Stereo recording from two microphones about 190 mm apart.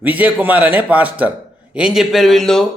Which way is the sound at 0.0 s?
10° right (ahead or behind).